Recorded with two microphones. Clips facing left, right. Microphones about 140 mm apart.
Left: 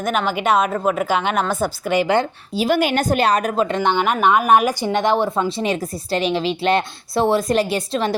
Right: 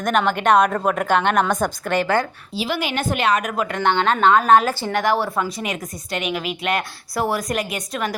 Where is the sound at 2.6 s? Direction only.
45° left (ahead or behind).